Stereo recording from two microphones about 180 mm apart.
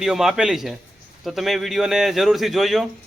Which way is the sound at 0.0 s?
5° right (ahead or behind).